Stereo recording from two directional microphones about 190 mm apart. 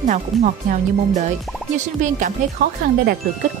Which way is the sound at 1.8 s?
40° right (ahead or behind).